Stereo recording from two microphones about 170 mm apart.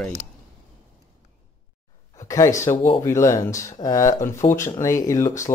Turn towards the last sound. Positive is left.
turn(degrees=15)  # may be behind; listen again after turning